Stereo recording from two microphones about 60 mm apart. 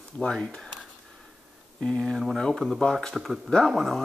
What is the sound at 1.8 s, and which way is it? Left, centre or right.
Speech, centre.